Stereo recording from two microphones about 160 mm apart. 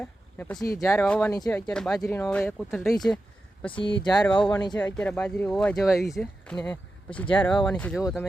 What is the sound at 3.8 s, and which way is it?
Speech, 30° left (ahead or behind).